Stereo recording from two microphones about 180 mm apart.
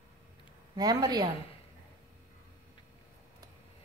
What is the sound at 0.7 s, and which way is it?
Speech, 20° right (ahead or behind).